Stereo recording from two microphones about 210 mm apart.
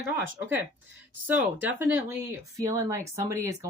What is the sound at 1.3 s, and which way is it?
Speech, 10° right (ahead or behind).